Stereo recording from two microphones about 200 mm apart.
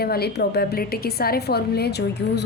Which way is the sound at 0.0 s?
50° left (ahead or behind).